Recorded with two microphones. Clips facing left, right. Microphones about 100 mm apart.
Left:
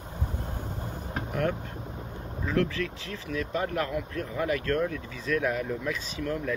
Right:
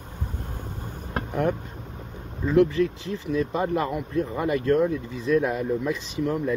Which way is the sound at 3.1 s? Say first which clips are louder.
Right 4 dB; 20° right (ahead or behind).